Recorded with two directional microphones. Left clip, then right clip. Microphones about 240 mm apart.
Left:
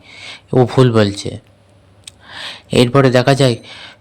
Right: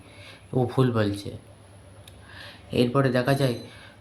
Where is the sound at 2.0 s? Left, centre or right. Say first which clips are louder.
Left 15 dB; left.